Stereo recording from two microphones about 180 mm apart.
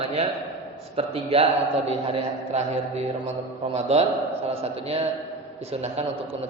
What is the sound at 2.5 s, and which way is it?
A man's voice, 35° right (ahead or behind).